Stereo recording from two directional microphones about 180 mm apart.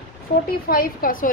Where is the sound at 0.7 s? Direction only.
55° left (ahead or behind).